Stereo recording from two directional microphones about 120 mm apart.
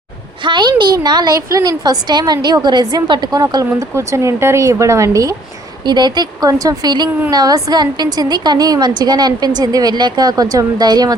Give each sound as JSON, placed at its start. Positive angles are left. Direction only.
{"t": 0.4, "sound": "a sound", "side_deg": -40}
{"t": 1.4, "sound": "a woman's voice", "side_deg": -30}
{"t": 5.8, "sound": "a woman's voice", "side_deg": -40}